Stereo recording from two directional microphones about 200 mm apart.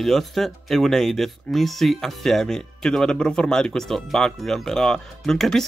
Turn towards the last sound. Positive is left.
turn(degrees=0)  # may be behind; listen again after turning